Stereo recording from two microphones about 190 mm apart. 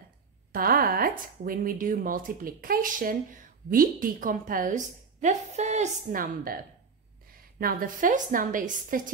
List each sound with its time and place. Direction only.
0.5 s a woman's voice: 50° right (ahead or behind)